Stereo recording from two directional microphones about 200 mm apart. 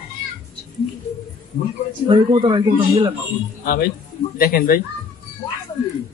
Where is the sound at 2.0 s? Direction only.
25° right (ahead or behind).